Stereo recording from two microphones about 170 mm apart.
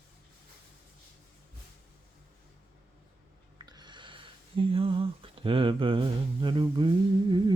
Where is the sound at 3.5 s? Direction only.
25° right (ahead or behind).